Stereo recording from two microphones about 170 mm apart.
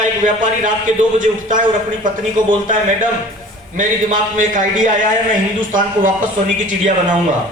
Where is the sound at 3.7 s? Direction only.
50° right (ahead or behind).